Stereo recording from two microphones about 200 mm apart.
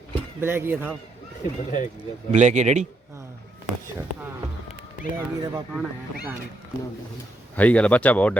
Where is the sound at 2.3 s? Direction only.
35° right (ahead or behind).